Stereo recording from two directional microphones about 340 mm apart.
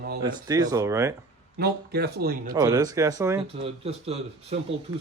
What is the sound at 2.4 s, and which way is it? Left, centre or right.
A man's voice, centre.